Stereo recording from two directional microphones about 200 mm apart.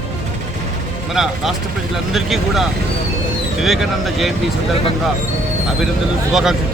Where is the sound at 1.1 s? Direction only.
Centre (ahead or behind).